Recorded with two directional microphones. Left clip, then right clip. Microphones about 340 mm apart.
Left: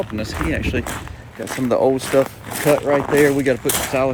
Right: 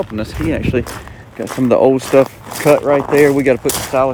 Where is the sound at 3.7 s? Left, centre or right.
Centre.